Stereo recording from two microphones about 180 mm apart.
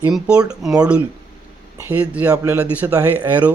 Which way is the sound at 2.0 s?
10° right (ahead or behind).